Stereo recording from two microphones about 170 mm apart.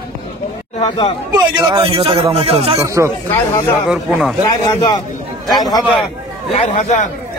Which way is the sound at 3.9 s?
5° right (ahead or behind).